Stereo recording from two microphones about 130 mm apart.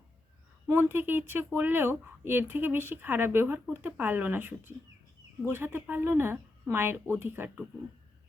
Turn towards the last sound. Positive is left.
turn(degrees=-10)  # may be behind; listen again after turning